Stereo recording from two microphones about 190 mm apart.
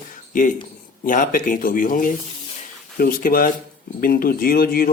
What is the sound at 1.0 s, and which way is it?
Speech, 45° left (ahead or behind).